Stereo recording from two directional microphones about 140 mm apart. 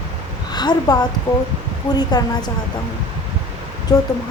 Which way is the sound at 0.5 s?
30° left (ahead or behind).